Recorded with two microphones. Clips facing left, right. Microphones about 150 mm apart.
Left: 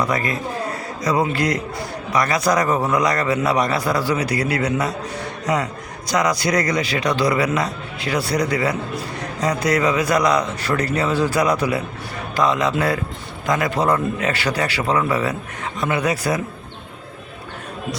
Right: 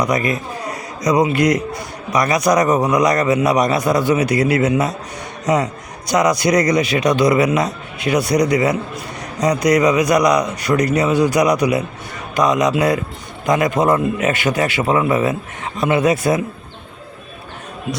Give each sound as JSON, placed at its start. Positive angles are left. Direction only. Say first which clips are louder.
{"t": 0.0, "sound": "a man's voice", "louder": "right 3 dB", "side_deg": -20}